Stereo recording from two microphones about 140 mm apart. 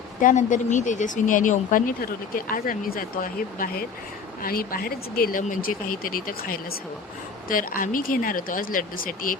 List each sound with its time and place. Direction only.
0.2 s speech: 70° left (ahead or behind)